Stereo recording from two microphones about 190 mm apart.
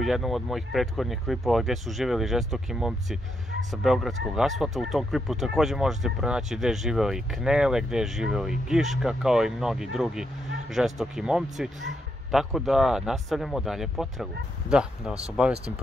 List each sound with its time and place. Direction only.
0.0 s speech: centre (ahead or behind)